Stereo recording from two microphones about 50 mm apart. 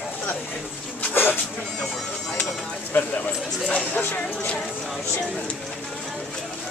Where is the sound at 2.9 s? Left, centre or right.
Left.